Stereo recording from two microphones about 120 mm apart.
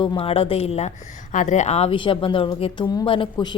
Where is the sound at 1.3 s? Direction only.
85° left; by 3.5 s 40° left (ahead or behind).